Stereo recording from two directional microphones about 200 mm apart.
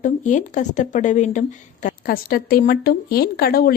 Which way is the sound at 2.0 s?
50° left (ahead or behind).